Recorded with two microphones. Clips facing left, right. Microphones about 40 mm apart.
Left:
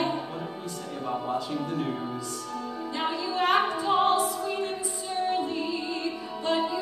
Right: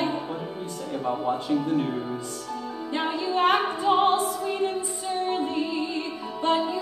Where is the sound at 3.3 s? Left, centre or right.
Right.